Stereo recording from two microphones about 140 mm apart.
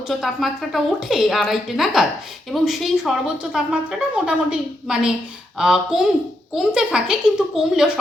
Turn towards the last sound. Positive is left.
turn(degrees=-5)  # may be behind; listen again after turning